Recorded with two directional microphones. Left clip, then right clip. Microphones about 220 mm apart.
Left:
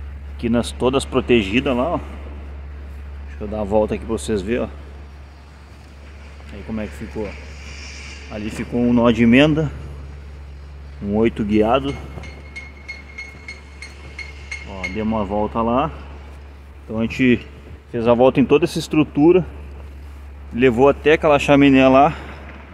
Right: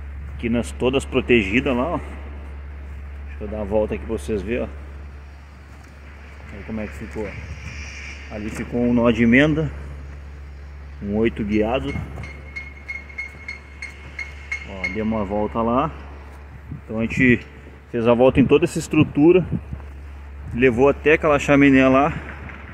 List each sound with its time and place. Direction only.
0.4 s speech: 5° left (ahead or behind)
1.2 s speech: 45° left (ahead or behind)
1.5 s speech: centre (ahead or behind)
3.3 s speech: 15° left (ahead or behind)
6.7 s speech: 15° left (ahead or behind)
8.3 s speech: 10° left (ahead or behind)
11.1 s speech: 10° left (ahead or behind)
14.7 s a sound: 5° left (ahead or behind)
15.2 s speech: 5° left (ahead or behind)
16.9 s speech: 5° left (ahead or behind)
17.9 s speech: 10° right (ahead or behind)
18.2 s speech: centre (ahead or behind)
20.5 s speech: 5° left (ahead or behind)
21.5 s speech: 10° left (ahead or behind)